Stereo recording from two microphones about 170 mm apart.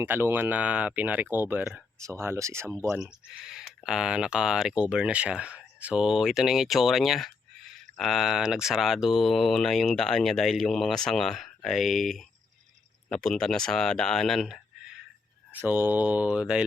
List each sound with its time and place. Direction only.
0.0 s speech: 15° right (ahead or behind)
3.0 s speech: 5° right (ahead or behind)
15.5 s speech: 10° right (ahead or behind)